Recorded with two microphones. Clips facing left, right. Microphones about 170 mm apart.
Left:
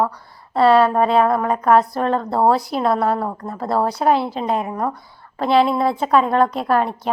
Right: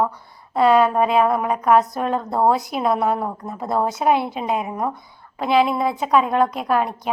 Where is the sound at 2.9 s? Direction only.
20° right (ahead or behind).